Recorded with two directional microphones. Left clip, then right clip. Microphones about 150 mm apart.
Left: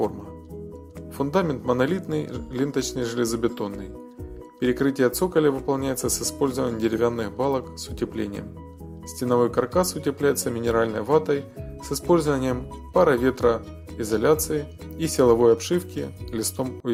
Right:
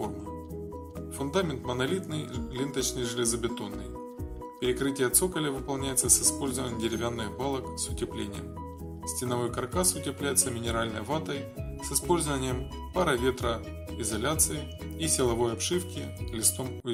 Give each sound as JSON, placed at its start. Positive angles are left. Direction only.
{"t": 1.2, "sound": "speech", "side_deg": 20}